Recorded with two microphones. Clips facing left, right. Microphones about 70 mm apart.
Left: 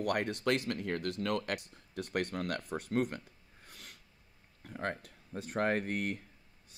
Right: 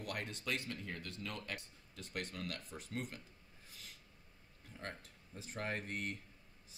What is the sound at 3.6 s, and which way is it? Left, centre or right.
Snort, left.